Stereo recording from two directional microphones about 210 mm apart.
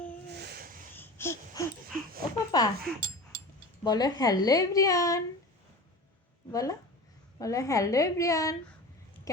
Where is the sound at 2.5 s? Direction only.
20° left (ahead or behind).